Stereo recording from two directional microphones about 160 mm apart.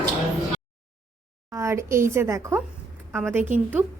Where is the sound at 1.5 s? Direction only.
20° right (ahead or behind).